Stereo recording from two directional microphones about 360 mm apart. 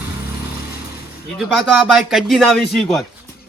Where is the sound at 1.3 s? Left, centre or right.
Centre.